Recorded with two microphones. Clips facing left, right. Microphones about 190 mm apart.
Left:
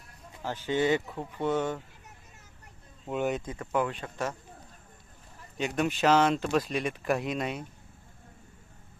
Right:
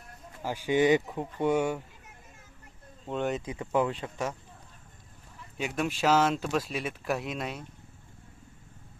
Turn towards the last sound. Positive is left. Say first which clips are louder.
# left 3 dB
turn(degrees=0)  # may be behind; listen again after turning